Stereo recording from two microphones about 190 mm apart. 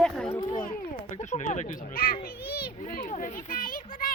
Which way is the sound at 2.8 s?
45° left (ahead or behind).